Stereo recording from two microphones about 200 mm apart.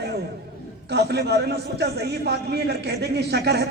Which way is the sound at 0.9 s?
55° right (ahead or behind).